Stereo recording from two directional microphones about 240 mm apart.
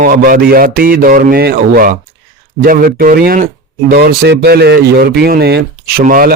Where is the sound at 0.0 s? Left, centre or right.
Right.